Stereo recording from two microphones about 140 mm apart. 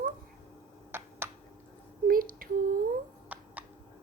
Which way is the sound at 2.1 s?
90° right.